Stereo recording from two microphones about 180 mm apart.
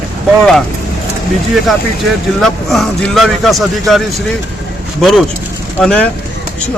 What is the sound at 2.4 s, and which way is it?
Speech, centre (ahead or behind).